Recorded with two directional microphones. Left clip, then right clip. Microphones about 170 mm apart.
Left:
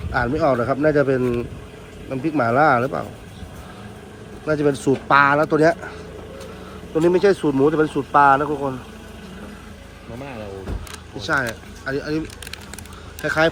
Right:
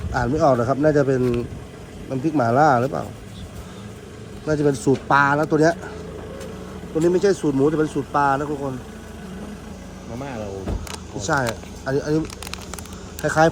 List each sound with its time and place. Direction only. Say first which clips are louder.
0.1 s speech: right 1 dB; 10° right (ahead or behind)
4.4 s speech: left 1 dB; 10° right (ahead or behind)
6.9 s speech: left 2 dB; 5° right (ahead or behind)
10.2 s speech: right 2 dB; 5° right (ahead or behind)
11.2 s speech: even; 20° right (ahead or behind)
13.2 s speech: right 1 dB; 20° right (ahead or behind)